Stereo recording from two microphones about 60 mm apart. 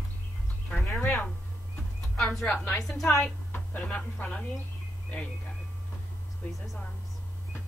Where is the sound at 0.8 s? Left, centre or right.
Left.